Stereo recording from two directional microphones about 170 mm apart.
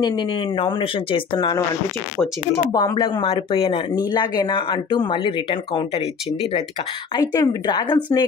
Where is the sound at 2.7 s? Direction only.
20° left (ahead or behind).